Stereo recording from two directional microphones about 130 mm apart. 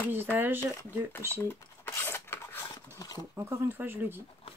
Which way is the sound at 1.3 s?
15° left (ahead or behind).